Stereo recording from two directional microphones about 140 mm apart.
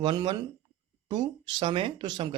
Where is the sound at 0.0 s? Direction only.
35° right (ahead or behind).